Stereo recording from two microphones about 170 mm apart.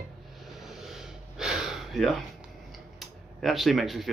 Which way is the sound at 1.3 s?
5° right (ahead or behind).